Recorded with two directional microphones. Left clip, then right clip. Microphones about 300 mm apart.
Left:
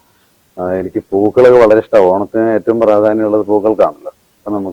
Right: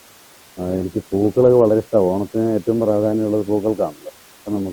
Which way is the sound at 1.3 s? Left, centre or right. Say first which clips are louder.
Left 7 dB; centre.